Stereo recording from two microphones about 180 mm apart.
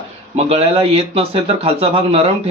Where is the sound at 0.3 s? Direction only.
35° right (ahead or behind).